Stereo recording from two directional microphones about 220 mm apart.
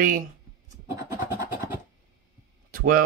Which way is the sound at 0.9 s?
10° right (ahead or behind).